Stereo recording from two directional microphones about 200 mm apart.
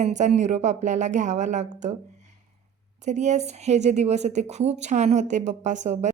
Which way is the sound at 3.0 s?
35° right (ahead or behind).